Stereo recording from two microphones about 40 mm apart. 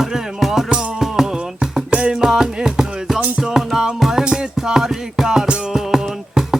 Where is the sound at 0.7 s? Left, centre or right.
Right.